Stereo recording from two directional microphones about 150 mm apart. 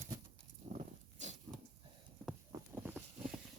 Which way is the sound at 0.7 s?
50° right (ahead or behind).